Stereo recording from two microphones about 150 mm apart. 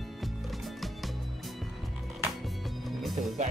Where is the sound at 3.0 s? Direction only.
Centre (ahead or behind).